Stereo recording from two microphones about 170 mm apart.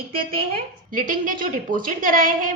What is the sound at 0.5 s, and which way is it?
A woman's voice, 55° right (ahead or behind).